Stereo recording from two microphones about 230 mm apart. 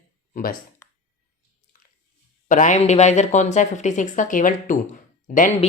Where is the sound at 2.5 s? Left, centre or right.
Left.